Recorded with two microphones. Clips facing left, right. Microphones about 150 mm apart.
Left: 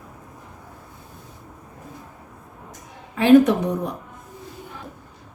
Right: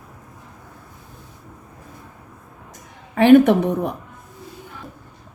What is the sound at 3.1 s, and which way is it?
Speech, 65° right (ahead or behind).